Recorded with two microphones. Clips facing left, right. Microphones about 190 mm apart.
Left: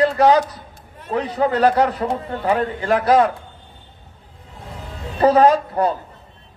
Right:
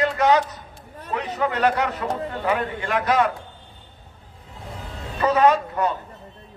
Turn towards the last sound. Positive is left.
turn(degrees=35)  # may be behind; listen again after turning